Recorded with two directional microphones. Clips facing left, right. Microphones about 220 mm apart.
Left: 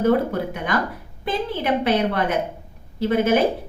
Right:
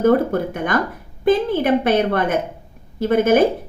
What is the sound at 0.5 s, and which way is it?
A woman's voice, 50° right (ahead or behind).